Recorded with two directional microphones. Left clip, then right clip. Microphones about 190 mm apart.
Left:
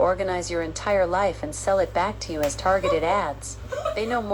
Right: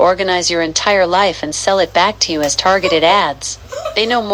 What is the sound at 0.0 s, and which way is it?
A woman's voice, 20° right (ahead or behind).